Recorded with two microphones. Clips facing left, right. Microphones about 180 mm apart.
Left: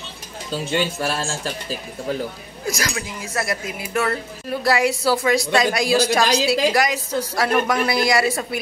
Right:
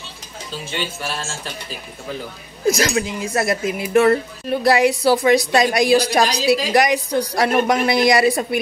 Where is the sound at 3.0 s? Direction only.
25° right (ahead or behind).